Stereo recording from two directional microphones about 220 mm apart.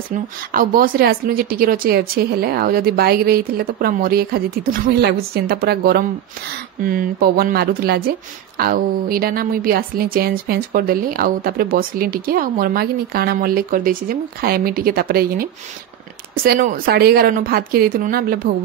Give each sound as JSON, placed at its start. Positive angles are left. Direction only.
{"t": 0.1, "sound": "speech", "side_deg": -40}
{"t": 16.4, "sound": "speech", "side_deg": -40}